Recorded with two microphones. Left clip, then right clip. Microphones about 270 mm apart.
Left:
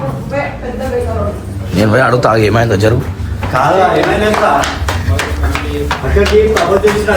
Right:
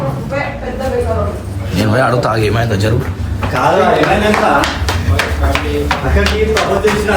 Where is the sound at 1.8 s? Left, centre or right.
Centre.